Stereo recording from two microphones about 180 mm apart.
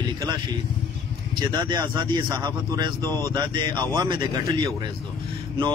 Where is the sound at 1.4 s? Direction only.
25° right (ahead or behind).